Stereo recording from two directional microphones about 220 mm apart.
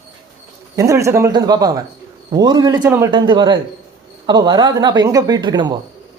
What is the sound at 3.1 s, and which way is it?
Speech, 20° right (ahead or behind).